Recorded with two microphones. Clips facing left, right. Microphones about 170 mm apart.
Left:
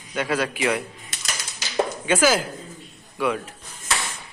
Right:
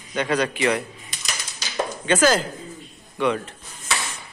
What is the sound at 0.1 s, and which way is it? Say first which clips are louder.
Speech: right 2 dB; 5° left (ahead or behind).